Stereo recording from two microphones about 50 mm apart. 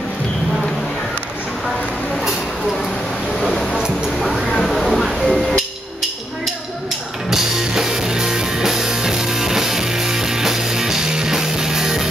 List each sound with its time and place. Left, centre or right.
4.5 s a sound: centre
4.7 s music: centre
7.2 s music: centre